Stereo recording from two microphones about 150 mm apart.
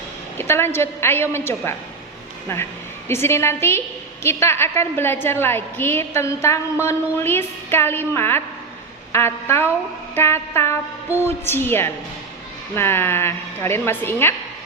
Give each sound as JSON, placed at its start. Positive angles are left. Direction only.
{"t": 0.3, "sound": "a woman's voice", "side_deg": 15}